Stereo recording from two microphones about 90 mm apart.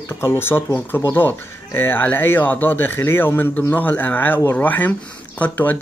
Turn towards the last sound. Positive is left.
turn(degrees=20)  # may be behind; listen again after turning